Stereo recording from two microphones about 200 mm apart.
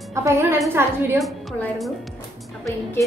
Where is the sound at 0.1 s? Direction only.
15° right (ahead or behind).